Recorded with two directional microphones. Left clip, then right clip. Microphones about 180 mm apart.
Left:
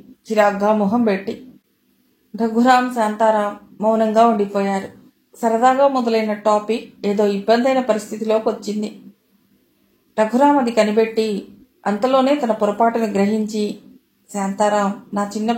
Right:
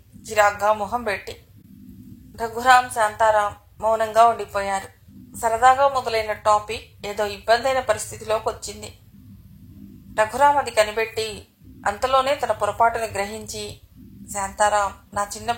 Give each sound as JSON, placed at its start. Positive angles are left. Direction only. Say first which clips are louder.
{"t": 0.3, "sound": "a woman's voice", "louder": "left 3 dB", "side_deg": -35}
{"t": 2.3, "sound": "a woman's voice", "louder": "left 1 dB", "side_deg": -35}
{"t": 10.1, "sound": "a woman's voice", "louder": "left 2 dB", "side_deg": -35}